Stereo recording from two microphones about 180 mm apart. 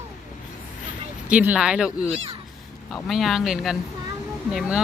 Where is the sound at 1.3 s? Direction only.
5° right (ahead or behind).